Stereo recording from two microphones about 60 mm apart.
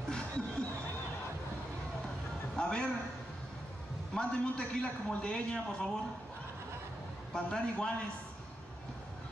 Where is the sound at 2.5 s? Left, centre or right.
Centre.